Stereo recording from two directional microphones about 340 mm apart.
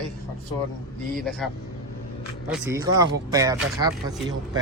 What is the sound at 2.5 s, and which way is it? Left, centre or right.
Speech, centre.